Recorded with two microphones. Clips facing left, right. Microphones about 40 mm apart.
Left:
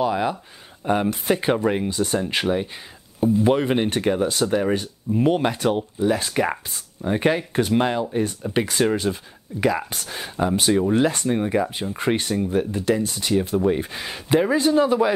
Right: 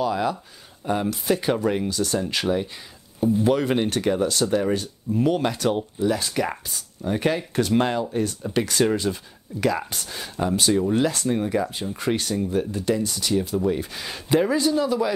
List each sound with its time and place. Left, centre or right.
0.0 s speech: left